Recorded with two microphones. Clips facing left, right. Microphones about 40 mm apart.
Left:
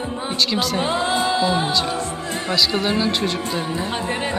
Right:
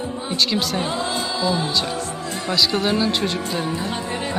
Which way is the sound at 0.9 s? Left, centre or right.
Left.